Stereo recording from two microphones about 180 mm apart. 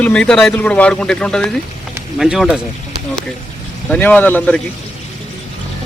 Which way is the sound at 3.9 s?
10° left (ahead or behind).